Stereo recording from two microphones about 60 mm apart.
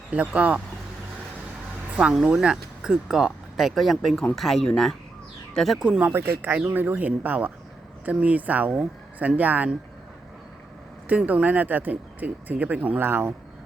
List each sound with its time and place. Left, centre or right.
0.1 s speech: right
2.0 s speech: centre
5.8 s speech: centre
6.1 s speech: right
11.1 s speech: right
13.0 s speech: right